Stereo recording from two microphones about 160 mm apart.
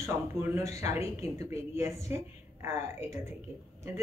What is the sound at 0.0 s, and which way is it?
Speech, 20° right (ahead or behind).